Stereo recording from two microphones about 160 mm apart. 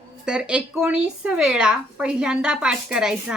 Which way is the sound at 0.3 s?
5° right (ahead or behind).